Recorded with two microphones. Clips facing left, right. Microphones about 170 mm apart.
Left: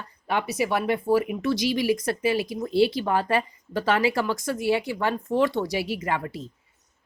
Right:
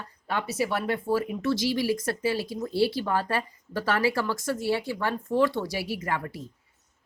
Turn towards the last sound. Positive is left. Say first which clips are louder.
# left 3 dB
turn(degrees=20)  # may be behind; listen again after turning